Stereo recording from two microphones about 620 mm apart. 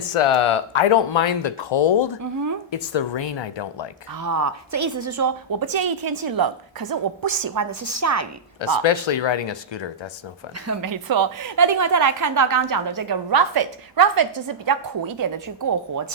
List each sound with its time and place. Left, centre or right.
0.1 s speech: left
4.2 s a woman's voice: right
8.6 s speech: left
10.7 s a woman's voice: right